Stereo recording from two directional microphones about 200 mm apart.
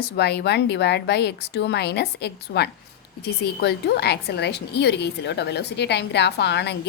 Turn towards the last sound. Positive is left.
turn(degrees=60)  # may be behind; listen again after turning